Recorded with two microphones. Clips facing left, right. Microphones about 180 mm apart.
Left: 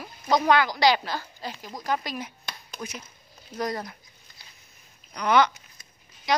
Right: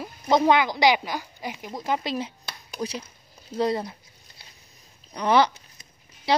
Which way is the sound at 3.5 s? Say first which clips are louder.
Right 5 dB; 25° right (ahead or behind).